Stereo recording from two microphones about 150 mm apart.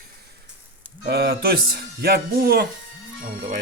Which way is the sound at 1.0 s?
90° right.